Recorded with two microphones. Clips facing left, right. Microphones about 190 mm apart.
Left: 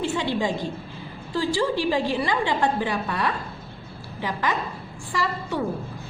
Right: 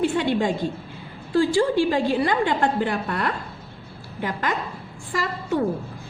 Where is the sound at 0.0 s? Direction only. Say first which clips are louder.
Right 3 dB; 55° right (ahead or behind).